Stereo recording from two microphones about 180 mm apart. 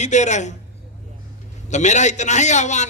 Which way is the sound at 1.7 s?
40° left (ahead or behind).